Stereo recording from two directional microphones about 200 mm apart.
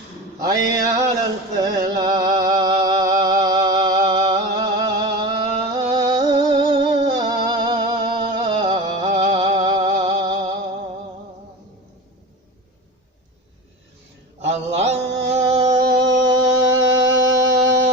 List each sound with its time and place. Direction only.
0.3 s a sound: 20° right (ahead or behind)
5.8 s music: 20° right (ahead or behind)
14.4 s mantra: 30° right (ahead or behind)
15.9 s music: 60° right (ahead or behind)
17.1 s music: 15° right (ahead or behind)